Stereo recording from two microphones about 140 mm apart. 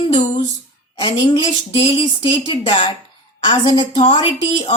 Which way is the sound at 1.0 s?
35° left (ahead or behind).